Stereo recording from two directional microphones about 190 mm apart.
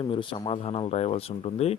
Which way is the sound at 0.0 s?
25° left (ahead or behind).